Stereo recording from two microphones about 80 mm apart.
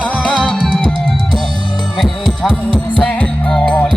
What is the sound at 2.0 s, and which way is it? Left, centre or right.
Music, centre.